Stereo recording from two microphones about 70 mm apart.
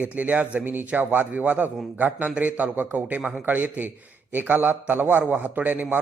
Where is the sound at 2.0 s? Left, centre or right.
Right.